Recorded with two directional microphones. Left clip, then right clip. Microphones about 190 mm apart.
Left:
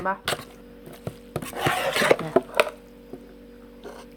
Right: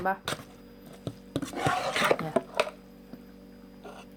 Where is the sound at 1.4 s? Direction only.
20° left (ahead or behind).